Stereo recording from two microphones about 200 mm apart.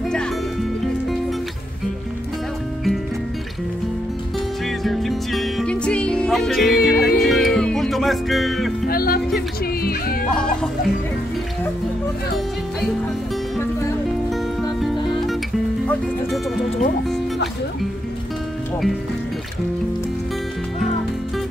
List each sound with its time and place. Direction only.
4.8 s music: centre (ahead or behind)
8.8 s music: 50° left (ahead or behind)
10.3 s music: 5° left (ahead or behind)
14.8 s music: centre (ahead or behind)